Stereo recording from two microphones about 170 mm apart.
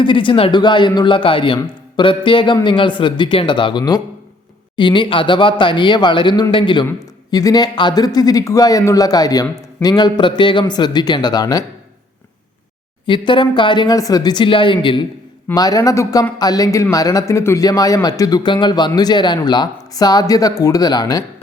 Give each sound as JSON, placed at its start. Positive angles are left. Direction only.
{"t": 0.0, "sound": "a man's voice", "side_deg": 30}
{"t": 13.1, "sound": "a man's voice", "side_deg": 30}